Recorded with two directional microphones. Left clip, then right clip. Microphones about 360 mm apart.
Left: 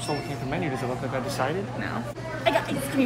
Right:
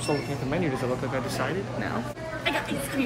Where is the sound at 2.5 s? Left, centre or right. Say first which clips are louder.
Left 4 dB; centre.